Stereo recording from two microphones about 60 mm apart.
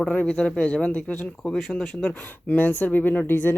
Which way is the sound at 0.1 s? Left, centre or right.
Left.